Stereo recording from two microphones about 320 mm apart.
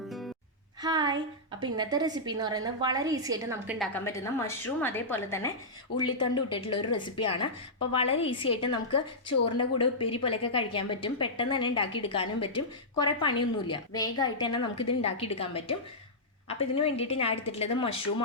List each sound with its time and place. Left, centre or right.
0.8 s a woman's voice: centre
3.9 s a woman's voice: centre